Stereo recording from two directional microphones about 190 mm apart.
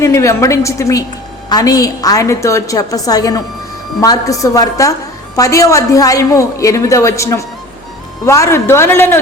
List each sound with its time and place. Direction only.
0.0 s a woman's voice: 15° left (ahead or behind)